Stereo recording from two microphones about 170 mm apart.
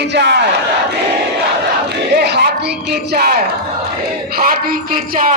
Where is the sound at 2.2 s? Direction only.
75° right (ahead or behind).